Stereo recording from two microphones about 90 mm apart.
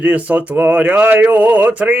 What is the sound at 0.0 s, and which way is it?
Speech, 15° right (ahead or behind).